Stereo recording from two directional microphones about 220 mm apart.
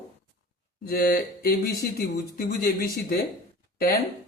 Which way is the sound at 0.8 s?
40° left (ahead or behind).